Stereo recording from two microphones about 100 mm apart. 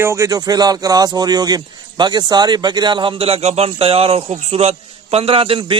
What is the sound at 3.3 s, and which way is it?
A man's voice, 85° right.